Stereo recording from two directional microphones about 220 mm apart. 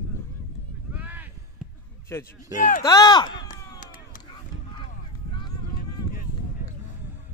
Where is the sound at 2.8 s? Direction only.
15° left (ahead or behind).